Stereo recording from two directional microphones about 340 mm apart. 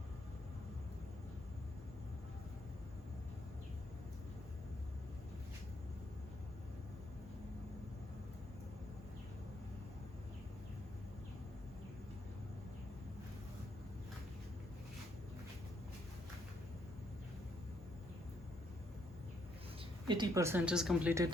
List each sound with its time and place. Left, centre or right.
20.1 s a woman's voice: centre